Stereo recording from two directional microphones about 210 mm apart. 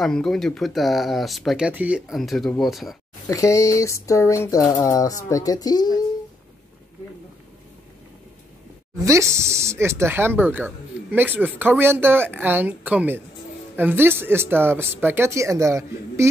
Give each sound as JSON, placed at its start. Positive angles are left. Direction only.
{"t": 0.0, "sound": "speech", "side_deg": 0}
{"t": 3.3, "sound": "speech", "side_deg": 15}
{"t": 9.0, "sound": "speech", "side_deg": -15}